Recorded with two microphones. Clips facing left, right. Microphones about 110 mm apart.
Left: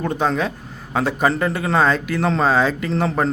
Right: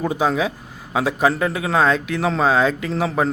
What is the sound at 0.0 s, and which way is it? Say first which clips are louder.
Speech: right 1 dB; 5° right (ahead or behind).